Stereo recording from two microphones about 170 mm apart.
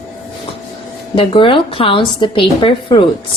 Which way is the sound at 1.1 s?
30° left (ahead or behind).